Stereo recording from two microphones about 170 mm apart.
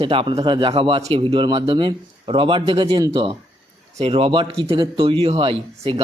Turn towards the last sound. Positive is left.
turn(degrees=-30)  # may be behind; listen again after turning